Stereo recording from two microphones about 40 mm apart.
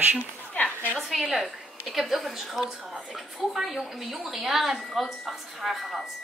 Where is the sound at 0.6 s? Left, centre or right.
Left.